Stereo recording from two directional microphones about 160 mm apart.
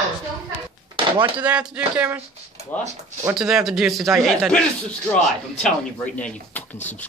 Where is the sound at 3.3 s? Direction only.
Centre (ahead or behind).